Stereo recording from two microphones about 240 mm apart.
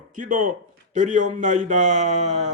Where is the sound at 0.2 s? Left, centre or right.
Right.